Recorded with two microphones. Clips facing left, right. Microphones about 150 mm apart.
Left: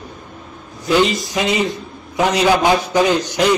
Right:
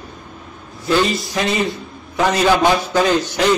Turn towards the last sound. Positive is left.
turn(degrees=15)  # may be behind; listen again after turning